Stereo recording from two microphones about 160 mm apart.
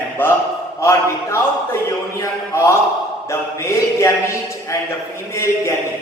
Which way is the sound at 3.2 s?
15° left (ahead or behind).